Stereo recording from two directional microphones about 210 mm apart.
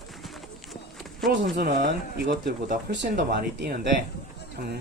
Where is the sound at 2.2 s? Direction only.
55° right (ahead or behind).